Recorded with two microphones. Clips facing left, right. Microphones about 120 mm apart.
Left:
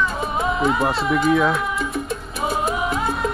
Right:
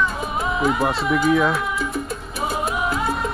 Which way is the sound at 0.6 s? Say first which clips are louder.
Right 1 dB; centre (ahead or behind).